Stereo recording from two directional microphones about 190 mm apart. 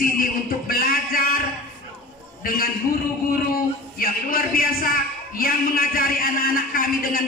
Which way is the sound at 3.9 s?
50° left (ahead or behind).